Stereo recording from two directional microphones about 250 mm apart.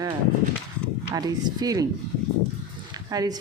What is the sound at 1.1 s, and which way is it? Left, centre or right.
Speech, centre.